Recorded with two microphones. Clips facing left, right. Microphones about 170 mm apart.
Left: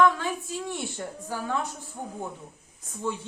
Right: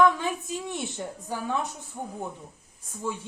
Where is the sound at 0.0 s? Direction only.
15° right (ahead or behind).